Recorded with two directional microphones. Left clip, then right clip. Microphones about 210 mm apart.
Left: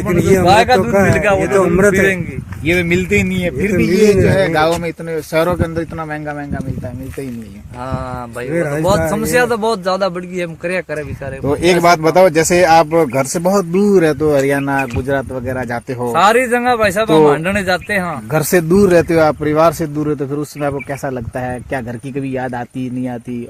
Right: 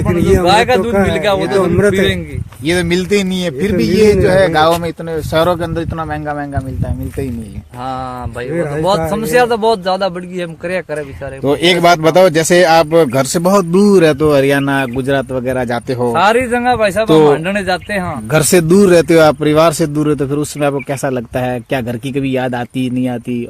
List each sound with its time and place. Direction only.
0.4 s speech: 50° right (ahead or behind)
0.8 s speech: 10° right (ahead or behind)
2.6 s a man's voice: 30° right (ahead or behind)
8.5 s speech: 10° left (ahead or behind)
9.0 s a man's voice: 30° right (ahead or behind)
11.4 s speech: 45° right (ahead or behind)
16.1 s speech: 5° right (ahead or behind)
18.3 s a man's voice: 55° right (ahead or behind)